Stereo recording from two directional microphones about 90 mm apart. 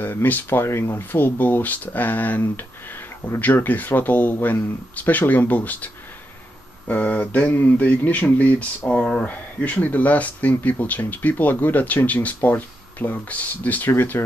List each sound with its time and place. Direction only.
0.0 s speech: 20° left (ahead or behind)
6.9 s speech: 15° left (ahead or behind)